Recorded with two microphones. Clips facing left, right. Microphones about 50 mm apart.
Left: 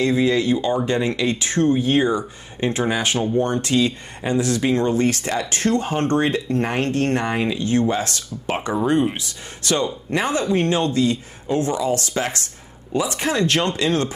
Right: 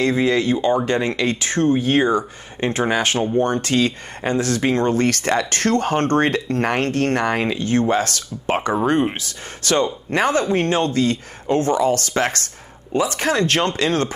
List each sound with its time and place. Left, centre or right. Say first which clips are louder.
0.0 s speech: even; right
8.5 s speech: right 2 dB; right
12.9 s speech: right 2 dB; right